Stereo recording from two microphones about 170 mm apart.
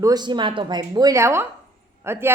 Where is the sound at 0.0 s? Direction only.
25° right (ahead or behind).